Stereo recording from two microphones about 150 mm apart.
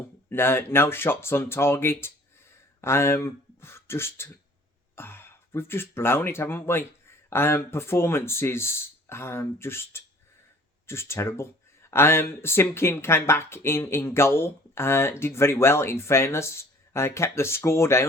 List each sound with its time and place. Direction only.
0.3 s speech: 15° left (ahead or behind)